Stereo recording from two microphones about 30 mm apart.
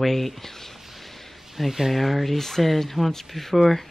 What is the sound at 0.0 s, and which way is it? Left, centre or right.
Speech, centre.